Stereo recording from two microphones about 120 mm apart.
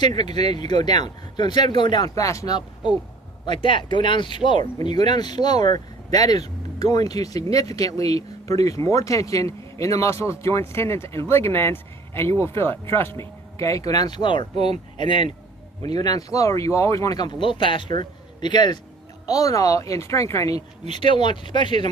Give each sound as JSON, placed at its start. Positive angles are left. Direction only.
{"t": 0.2, "sound": "speech", "side_deg": 35}
{"t": 3.4, "sound": "speech", "side_deg": 40}
{"t": 14.5, "sound": "speech", "side_deg": -60}
{"t": 14.9, "sound": "speech", "side_deg": 45}
{"t": 20.9, "sound": "speech", "side_deg": 45}